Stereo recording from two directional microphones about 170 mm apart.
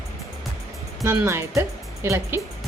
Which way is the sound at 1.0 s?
15° right (ahead or behind).